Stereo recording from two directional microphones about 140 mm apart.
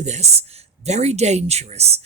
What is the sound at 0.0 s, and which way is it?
Speech, 55° right (ahead or behind).